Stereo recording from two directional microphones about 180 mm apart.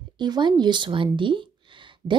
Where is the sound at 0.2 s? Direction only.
25° right (ahead or behind).